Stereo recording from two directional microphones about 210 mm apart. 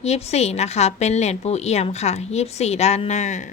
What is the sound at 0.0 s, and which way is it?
A woman's voice, 30° left (ahead or behind).